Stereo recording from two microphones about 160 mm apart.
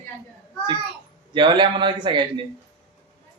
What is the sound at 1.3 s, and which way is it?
Speech, 30° right (ahead or behind).